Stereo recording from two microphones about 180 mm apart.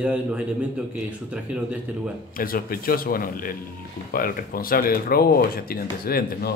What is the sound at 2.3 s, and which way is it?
A man's voice, 50° left (ahead or behind).